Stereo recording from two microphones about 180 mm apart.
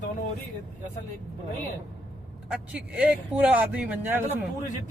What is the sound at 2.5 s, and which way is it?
Speech, 5° right (ahead or behind).